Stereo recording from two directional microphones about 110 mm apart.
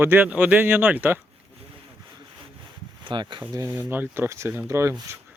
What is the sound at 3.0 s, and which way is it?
Speech, 45° right (ahead or behind).